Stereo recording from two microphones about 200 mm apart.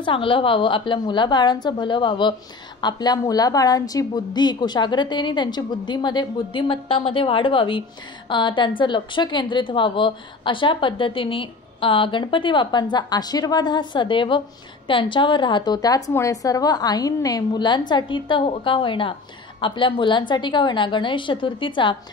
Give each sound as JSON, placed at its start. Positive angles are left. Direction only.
{"t": 0.0, "sound": "a woman's voice", "side_deg": 25}